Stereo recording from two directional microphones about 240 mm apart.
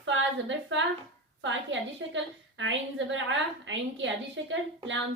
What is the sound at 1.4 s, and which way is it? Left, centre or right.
Speech, right.